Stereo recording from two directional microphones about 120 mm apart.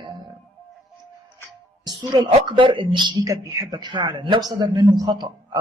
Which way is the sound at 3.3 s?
30° right (ahead or behind).